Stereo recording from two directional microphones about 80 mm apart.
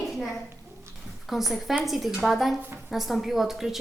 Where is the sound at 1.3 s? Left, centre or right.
Centre.